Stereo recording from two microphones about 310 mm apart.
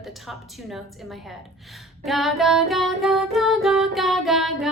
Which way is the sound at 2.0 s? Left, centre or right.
Centre.